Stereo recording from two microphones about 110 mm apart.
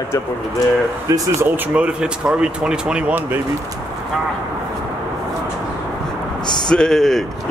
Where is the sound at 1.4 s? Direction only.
15° right (ahead or behind).